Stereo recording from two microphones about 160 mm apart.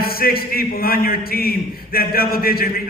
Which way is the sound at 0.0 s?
70° left (ahead or behind).